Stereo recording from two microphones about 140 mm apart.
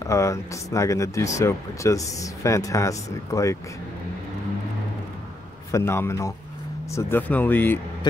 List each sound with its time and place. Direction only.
0.0 s speech: 20° left (ahead or behind)
5.7 s speech: 20° left (ahead or behind)